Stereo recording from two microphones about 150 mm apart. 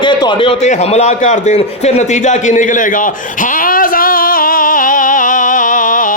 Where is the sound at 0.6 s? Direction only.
50° left (ahead or behind).